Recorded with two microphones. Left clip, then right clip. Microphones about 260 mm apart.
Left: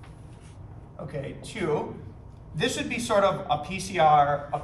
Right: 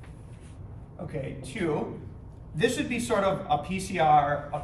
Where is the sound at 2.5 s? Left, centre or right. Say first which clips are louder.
Right 1 dB; centre.